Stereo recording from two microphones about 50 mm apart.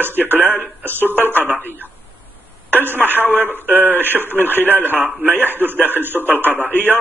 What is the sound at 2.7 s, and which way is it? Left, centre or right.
Speech, right.